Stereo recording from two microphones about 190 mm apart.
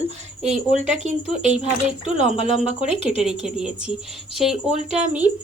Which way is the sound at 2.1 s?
30° left (ahead or behind).